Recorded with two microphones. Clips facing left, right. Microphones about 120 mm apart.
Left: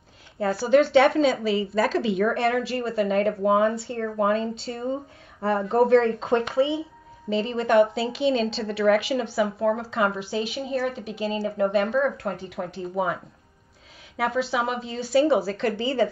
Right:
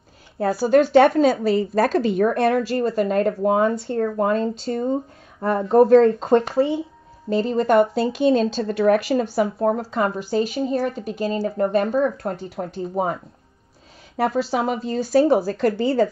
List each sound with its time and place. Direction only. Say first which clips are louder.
0.9 s a woman's voice: right 4 dB; 45° right (ahead or behind)